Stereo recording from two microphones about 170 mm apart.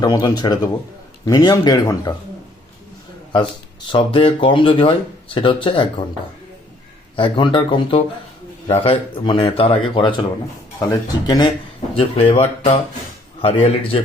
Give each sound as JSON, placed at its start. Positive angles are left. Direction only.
{"t": 0.0, "sound": "speech", "side_deg": 20}
{"t": 3.9, "sound": "speech", "side_deg": 30}
{"t": 7.2, "sound": "speech", "side_deg": 30}